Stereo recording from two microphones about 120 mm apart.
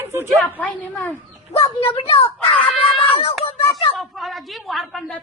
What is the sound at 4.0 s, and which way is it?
A woman's voice, centre (ahead or behind).